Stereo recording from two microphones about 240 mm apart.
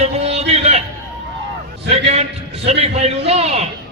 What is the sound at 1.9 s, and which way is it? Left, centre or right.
A man's voice, right.